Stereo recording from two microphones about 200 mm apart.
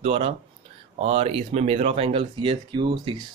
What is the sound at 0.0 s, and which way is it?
Speech, 30° right (ahead or behind).